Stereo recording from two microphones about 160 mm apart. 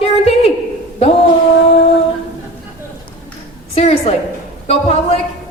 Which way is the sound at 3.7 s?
40° left (ahead or behind).